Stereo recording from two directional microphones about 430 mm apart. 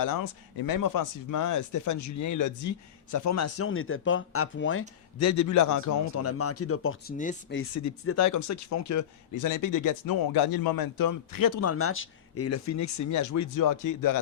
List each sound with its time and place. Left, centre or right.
0.0 s speech: left
7.2 s speech: centre
7.6 s speech: left
11.6 s speech: left